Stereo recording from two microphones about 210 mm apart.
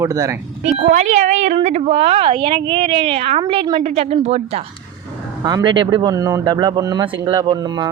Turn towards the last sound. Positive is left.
turn(degrees=-20)  # may be behind; listen again after turning